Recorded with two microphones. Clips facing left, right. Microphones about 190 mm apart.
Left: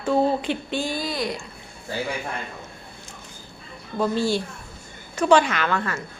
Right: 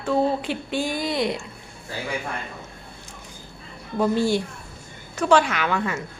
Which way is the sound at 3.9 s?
15° right (ahead or behind).